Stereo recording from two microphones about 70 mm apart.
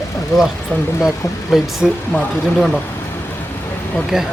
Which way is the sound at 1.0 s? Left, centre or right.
Centre.